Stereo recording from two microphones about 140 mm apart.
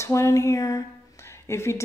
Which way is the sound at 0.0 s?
20° left (ahead or behind).